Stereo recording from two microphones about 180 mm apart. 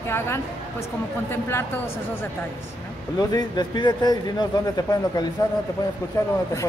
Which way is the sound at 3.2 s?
20° left (ahead or behind).